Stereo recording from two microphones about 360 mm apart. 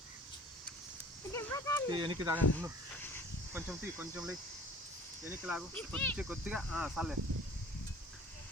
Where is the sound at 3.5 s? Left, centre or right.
Centre.